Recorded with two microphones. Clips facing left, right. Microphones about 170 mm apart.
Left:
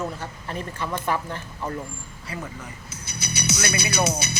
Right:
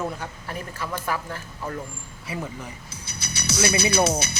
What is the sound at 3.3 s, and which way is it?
Speech, 25° right (ahead or behind).